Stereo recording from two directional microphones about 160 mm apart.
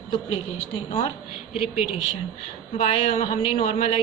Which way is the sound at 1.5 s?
40° left (ahead or behind).